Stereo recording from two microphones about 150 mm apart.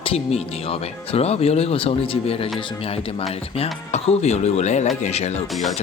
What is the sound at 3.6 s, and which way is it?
Speech, 45° left (ahead or behind).